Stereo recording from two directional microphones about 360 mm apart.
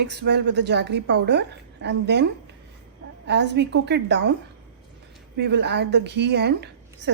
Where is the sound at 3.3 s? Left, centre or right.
Right.